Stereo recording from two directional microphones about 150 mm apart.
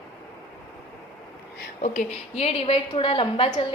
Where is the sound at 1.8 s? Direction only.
55° left (ahead or behind); by 3.5 s 35° left (ahead or behind).